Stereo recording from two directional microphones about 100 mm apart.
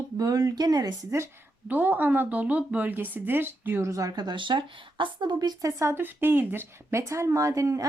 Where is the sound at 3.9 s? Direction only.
40° right (ahead or behind).